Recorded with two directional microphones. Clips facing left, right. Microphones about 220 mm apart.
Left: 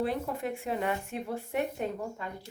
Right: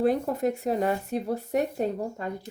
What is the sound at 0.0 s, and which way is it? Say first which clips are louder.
A woman's voice: right 7 dB; 45° right (ahead or behind).